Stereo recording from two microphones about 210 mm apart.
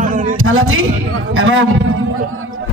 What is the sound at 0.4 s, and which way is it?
A man's voice, 75° right (ahead or behind).